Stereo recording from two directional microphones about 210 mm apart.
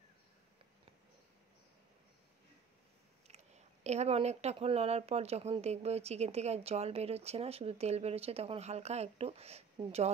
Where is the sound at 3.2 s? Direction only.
30° right (ahead or behind).